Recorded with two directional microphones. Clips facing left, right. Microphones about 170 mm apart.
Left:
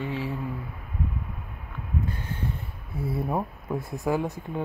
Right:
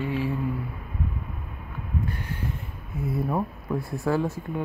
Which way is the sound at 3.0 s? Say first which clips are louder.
Right 1 dB; 25° left (ahead or behind).